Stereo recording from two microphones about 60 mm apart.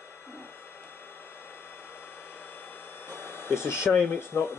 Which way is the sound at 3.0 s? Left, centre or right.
Left.